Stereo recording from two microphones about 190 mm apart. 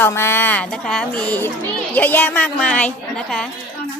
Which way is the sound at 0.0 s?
15° left (ahead or behind).